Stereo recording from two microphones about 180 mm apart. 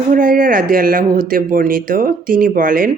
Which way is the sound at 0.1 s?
50° right (ahead or behind).